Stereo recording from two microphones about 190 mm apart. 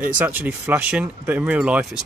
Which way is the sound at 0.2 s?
10° right (ahead or behind).